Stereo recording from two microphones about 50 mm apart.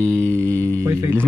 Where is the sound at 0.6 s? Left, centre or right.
Right.